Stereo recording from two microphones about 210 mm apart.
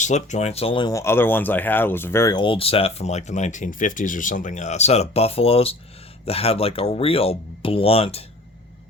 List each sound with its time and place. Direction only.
0.0 s speech: 35° left (ahead or behind)